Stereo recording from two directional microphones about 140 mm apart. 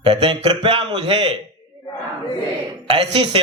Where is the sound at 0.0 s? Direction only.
35° right (ahead or behind).